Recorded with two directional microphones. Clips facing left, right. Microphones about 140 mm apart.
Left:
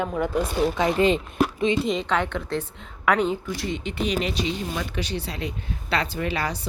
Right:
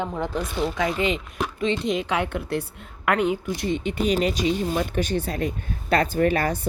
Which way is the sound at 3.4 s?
25° right (ahead or behind).